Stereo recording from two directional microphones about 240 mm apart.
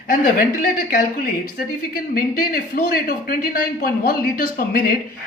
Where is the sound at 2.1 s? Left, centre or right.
Left.